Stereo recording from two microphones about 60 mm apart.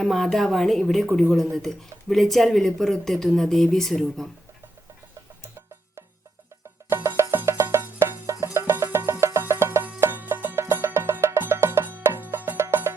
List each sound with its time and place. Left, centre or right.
0.0 s speech: centre
6.9 s music: right
12.5 s music: right